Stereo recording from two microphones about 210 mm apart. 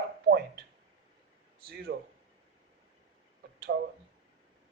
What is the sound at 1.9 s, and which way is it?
Speech, 55° right (ahead or behind).